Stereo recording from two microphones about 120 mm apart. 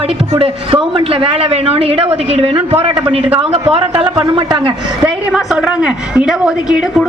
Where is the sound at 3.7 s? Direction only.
40° right (ahead or behind).